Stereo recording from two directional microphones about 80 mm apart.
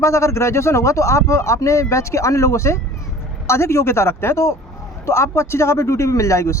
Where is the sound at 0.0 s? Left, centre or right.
Left.